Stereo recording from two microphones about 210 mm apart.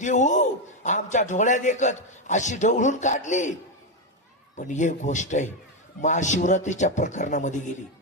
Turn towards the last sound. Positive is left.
turn(degrees=35)  # may be behind; listen again after turning